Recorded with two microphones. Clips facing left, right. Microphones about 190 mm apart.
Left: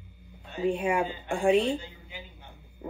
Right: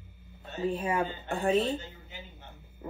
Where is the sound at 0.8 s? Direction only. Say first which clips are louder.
Left 3 dB; 15° left (ahead or behind).